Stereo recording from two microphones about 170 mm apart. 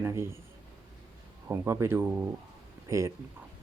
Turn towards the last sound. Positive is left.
turn(degrees=-15)  # may be behind; listen again after turning